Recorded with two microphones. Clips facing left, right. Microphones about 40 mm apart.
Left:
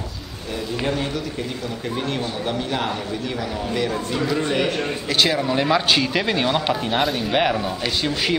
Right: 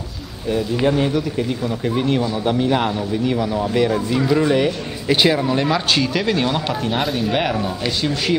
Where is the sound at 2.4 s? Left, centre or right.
Centre.